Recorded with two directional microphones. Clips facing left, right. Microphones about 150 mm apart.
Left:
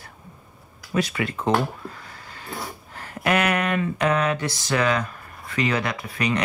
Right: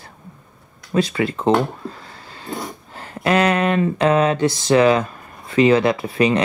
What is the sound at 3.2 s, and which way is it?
Speech, 30° right (ahead or behind).